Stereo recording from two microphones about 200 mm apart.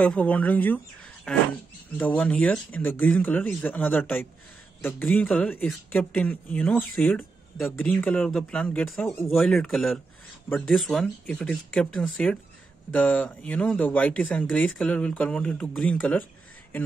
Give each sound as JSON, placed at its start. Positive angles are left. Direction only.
{"t": 0.0, "sound": "speech", "side_deg": 5}